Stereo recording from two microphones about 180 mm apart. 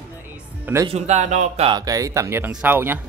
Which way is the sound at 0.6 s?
15° right (ahead or behind).